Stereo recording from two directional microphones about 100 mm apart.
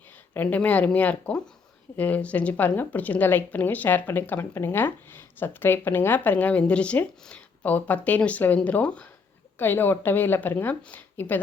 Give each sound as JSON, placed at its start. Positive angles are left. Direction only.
{"t": 0.3, "sound": "a woman's voice", "side_deg": 15}